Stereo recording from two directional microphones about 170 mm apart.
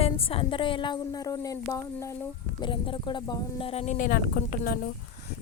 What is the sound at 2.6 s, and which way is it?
Speech, 30° left (ahead or behind).